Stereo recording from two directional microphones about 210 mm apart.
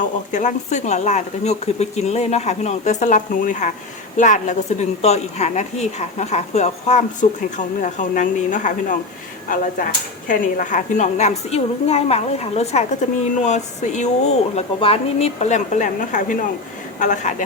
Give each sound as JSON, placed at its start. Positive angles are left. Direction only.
{"t": 0.0, "sound": "a woman's voice", "side_deg": 35}
{"t": 10.2, "sound": "a woman's voice", "side_deg": 40}